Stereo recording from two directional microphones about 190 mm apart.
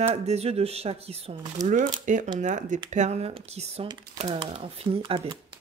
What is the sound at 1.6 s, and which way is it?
Speech, 20° right (ahead or behind).